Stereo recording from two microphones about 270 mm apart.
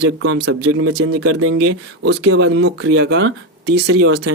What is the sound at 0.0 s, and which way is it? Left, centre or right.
Speech, right.